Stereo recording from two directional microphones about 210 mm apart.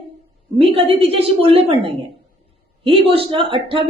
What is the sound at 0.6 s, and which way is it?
Speech, 25° right (ahead or behind).